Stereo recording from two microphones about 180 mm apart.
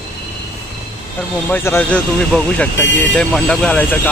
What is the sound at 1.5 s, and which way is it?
Speech, 10° left (ahead or behind).